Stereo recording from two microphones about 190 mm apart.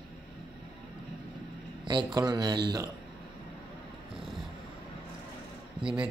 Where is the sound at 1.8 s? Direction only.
25° right (ahead or behind).